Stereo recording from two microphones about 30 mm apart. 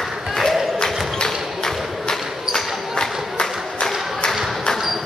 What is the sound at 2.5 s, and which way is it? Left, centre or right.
Basketball bounce, centre.